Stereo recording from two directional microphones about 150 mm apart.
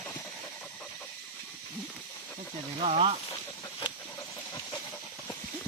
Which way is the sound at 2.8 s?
40° right (ahead or behind).